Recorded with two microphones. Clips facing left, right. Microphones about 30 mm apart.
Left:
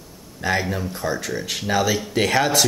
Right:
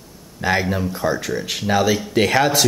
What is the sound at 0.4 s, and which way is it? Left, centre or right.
Speech, centre.